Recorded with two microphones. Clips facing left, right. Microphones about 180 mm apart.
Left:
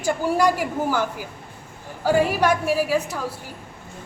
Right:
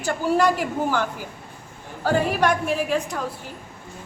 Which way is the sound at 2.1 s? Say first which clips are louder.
Left 2 dB; 10° left (ahead or behind).